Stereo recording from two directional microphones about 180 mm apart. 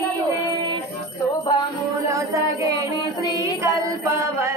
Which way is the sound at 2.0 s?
15° right (ahead or behind).